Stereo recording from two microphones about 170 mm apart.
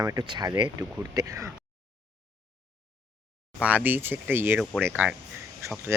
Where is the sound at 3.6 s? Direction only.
10° right (ahead or behind).